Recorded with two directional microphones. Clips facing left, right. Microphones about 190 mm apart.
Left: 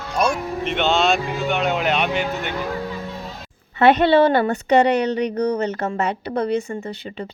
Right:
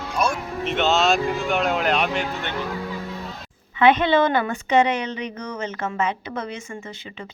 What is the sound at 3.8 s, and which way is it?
A woman's voice, 40° left (ahead or behind).